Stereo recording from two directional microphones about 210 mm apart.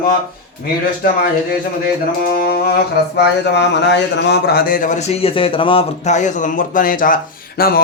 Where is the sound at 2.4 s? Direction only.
45° left (ahead or behind).